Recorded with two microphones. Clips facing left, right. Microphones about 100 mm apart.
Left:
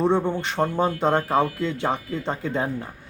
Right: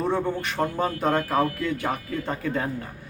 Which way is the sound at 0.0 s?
25° left (ahead or behind).